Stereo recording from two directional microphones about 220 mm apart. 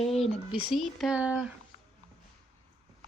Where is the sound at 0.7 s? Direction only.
Centre (ahead or behind).